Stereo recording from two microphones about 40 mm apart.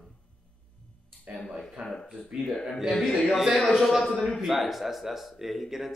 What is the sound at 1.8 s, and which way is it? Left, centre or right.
Speech, right.